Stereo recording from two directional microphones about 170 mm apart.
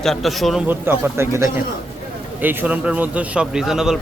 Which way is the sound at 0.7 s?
10° right (ahead or behind).